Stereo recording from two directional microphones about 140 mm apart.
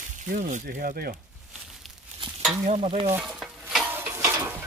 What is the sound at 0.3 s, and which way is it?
Speech, 60° right (ahead or behind).